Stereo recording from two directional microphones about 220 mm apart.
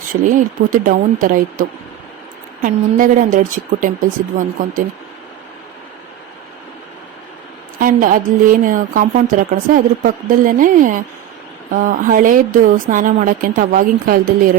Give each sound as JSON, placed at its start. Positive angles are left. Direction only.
{"t": 0.1, "sound": "a woman's voice", "side_deg": -35}
{"t": 7.8, "sound": "a woman's voice", "side_deg": -40}